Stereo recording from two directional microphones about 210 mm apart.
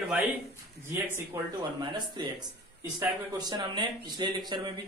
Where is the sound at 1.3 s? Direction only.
10° right (ahead or behind).